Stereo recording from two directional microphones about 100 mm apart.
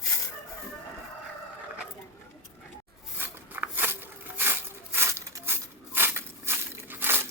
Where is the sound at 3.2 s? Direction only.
20° right (ahead or behind).